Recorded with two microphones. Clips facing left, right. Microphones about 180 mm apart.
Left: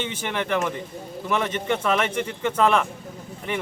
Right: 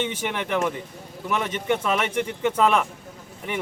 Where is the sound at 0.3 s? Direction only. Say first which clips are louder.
Left 2 dB; 10° right (ahead or behind).